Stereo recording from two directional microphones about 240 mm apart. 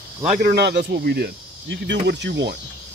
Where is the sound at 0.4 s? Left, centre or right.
Right.